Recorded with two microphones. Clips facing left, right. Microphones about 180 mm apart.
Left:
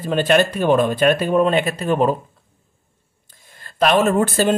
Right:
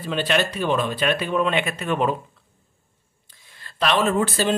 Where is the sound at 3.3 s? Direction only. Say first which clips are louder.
Left 3 dB; 45° left (ahead or behind).